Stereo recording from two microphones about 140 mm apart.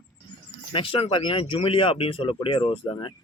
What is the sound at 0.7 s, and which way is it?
Speech, 40° left (ahead or behind).